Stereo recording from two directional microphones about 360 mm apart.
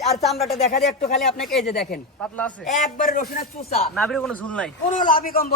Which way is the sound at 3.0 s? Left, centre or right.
Left.